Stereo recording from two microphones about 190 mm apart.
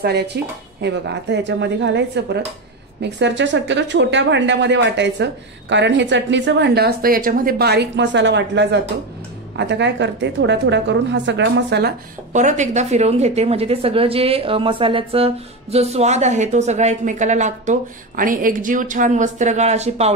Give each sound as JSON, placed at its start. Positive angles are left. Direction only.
{"t": 0.3, "sound": "a woman's voice", "side_deg": -60}
{"t": 12.3, "sound": "a woman's voice", "side_deg": -40}